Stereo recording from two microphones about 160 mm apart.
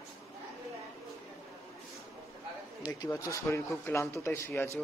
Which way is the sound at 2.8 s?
25° left (ahead or behind).